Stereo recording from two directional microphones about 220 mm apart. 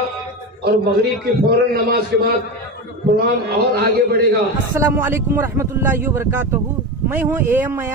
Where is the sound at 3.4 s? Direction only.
45° right (ahead or behind).